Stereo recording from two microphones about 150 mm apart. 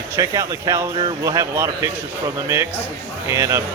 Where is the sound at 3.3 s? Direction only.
20° right (ahead or behind).